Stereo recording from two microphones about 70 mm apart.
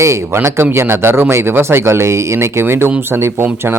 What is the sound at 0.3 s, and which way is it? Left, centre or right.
Speech, right.